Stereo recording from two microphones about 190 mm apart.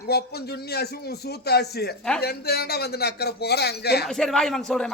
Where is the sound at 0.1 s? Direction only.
55° left (ahead or behind).